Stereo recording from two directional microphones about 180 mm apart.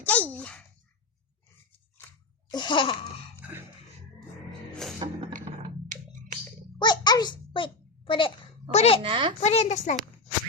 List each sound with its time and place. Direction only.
0.0 s a sound: 10° left (ahead or behind)
2.5 s laughter: 25° left (ahead or behind)
4.9 s music: 20° right (ahead or behind)
6.7 s a sound: 25° left (ahead or behind)
8.7 s a woman's voice: 35° left (ahead or behind)
9.0 s a child's voice: 30° right (ahead or behind)
9.4 s a woman's voice: 40° left (ahead or behind)